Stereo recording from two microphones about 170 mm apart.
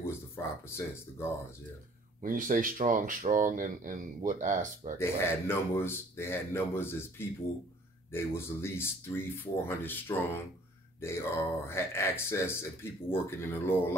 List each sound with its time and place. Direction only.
0.4 s a sound: 15° left (ahead or behind)
0.7 s speech: 15° left (ahead or behind)
2.2 s speech: 50° right (ahead or behind)
4.9 s speech: 15° left (ahead or behind)